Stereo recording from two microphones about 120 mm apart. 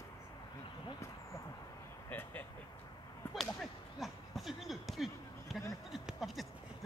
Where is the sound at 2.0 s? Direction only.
15° left (ahead or behind).